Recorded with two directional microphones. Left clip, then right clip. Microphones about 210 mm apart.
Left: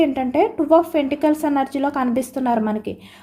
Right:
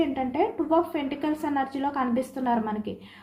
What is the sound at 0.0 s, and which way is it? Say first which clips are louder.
Speech: left 8 dB; 55° left (ahead or behind).